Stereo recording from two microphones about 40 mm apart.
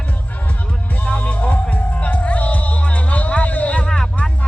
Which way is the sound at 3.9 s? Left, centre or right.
Centre.